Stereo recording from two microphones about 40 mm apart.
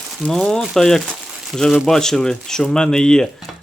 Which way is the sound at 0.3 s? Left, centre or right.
Centre.